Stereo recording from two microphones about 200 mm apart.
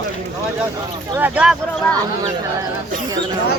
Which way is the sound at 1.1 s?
10° right (ahead or behind).